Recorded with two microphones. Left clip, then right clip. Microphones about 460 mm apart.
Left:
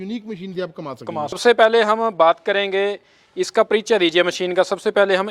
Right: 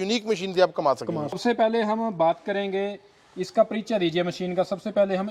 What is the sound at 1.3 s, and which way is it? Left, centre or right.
Speech, left.